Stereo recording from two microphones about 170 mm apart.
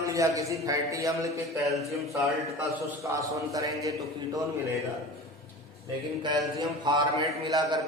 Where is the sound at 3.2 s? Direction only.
20° right (ahead or behind).